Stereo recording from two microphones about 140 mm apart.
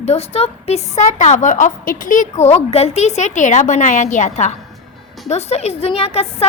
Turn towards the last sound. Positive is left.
turn(degrees=45)  # may be behind; listen again after turning